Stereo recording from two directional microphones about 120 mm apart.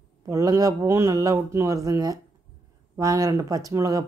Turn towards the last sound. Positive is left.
turn(degrees=-30)  # may be behind; listen again after turning